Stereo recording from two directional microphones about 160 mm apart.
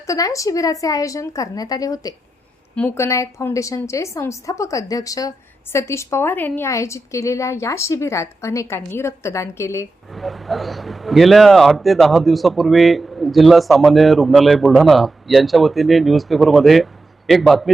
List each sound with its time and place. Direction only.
0.1 s a woman's voice: 20° left (ahead or behind)
10.1 s speech: centre (ahead or behind)